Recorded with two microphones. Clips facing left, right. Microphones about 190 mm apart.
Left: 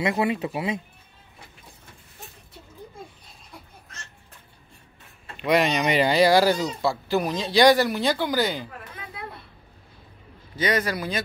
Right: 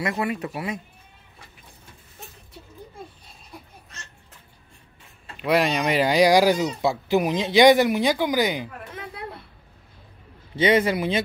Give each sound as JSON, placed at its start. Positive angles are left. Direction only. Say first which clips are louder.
{"t": 0.0, "sound": "speech", "louder": "left 2 dB", "side_deg": 25}
{"t": 5.4, "sound": "speech", "louder": "even", "side_deg": -5}
{"t": 10.5, "sound": "a man's voice", "louder": "right 5 dB", "side_deg": -25}